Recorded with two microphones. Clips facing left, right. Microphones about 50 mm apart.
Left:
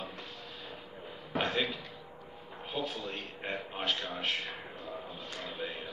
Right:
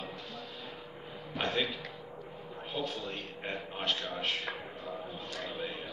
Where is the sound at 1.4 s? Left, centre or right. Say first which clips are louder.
Even; centre.